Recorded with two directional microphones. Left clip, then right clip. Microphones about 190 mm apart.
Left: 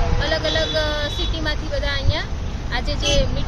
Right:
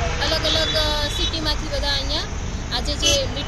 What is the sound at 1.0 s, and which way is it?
Speech, 25° left (ahead or behind).